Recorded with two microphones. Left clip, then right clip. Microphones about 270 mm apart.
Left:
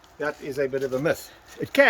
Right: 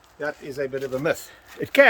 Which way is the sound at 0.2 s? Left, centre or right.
Centre.